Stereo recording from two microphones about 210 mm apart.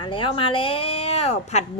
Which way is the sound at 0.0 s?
25° left (ahead or behind).